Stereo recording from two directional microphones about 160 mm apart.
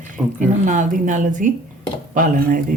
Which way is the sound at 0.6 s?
50° right (ahead or behind).